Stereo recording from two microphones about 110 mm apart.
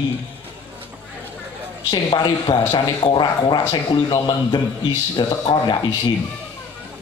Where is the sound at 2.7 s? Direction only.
45° left (ahead or behind).